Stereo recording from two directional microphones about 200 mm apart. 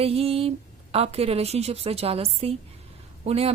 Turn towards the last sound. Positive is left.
turn(degrees=-30)  # may be behind; listen again after turning